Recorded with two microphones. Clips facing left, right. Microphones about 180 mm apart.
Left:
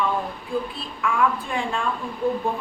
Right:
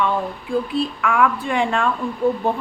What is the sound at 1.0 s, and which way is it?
Speech, 80° right.